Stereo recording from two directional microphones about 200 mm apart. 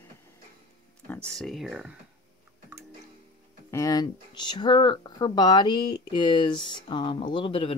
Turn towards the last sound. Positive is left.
turn(degrees=25)  # may be behind; listen again after turning